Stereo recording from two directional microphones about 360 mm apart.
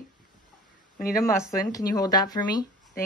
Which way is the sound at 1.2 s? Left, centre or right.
Centre.